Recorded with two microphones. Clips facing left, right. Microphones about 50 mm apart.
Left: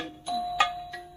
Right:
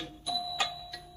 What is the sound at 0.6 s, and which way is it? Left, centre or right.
Music, left.